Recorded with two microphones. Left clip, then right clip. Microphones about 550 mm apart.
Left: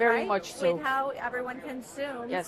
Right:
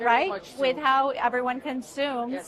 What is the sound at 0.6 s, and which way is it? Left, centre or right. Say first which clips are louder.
A woman's voice: right 8 dB; right.